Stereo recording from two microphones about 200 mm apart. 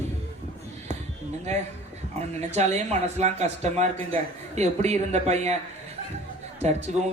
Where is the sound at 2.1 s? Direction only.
35° right (ahead or behind).